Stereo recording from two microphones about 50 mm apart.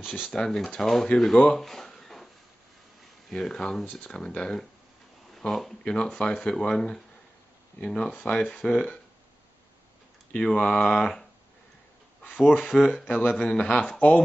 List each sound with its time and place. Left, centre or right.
0.0 s speech: centre
0.3 s speech: centre
1.5 s a sound: centre
3.3 s speech: centre
3.8 s speech: left
4.1 s speech: centre
10.4 s speech: centre
12.2 s speech: left
12.5 s speech: centre
13.0 s speech: left
13.3 s speech: left
13.9 s speech: left